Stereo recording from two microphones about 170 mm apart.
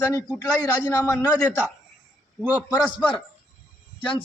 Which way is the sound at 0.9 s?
20° left (ahead or behind).